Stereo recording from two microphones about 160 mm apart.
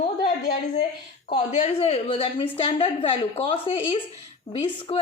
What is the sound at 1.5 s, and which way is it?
A woman's voice, 40° left (ahead or behind).